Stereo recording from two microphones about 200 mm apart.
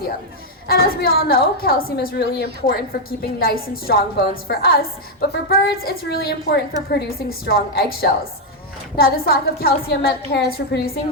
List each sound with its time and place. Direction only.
0.7 s a woman's voice: 50° left (ahead or behind)